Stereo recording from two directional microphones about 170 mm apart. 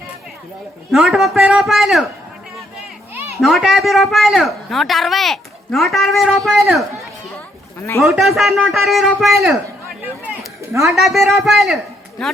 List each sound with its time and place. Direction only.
0.9 s speech: centre (ahead or behind)
3.2 s children playing: 15° right (ahead or behind)
3.4 s speech: centre (ahead or behind)
7.8 s a man's voice: 15° left (ahead or behind)
8.0 s speech: centre (ahead or behind)
10.6 s a sound: 15° right (ahead or behind)
10.8 s speech: centre (ahead or behind)